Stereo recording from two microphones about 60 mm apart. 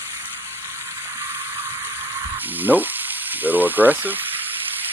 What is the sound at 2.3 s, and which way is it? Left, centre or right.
Frying, right.